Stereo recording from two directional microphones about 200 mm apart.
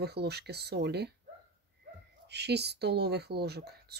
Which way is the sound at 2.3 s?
55° right (ahead or behind).